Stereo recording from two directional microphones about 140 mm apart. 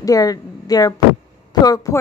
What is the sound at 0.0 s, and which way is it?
Speech, 25° left (ahead or behind).